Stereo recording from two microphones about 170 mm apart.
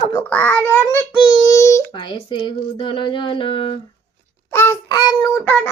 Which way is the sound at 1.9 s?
30° left (ahead or behind).